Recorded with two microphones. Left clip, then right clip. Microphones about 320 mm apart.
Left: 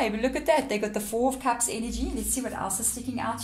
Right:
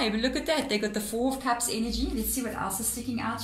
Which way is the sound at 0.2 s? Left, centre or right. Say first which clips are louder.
Left 4 dB; centre.